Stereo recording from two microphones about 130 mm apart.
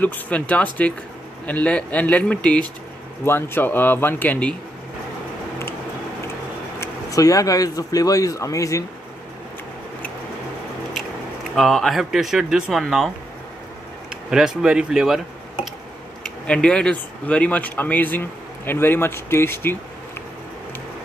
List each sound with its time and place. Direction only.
0.0 s speech: 10° left (ahead or behind)
6.8 s speech: 25° left (ahead or behind)
11.5 s speech: centre (ahead or behind)
14.3 s speech: 5° right (ahead or behind)
16.4 s speech: 5° left (ahead or behind)